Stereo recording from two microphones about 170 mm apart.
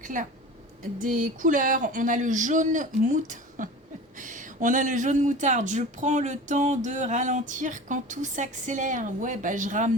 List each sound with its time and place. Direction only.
0.0 s a woman's voice: 50° right (ahead or behind)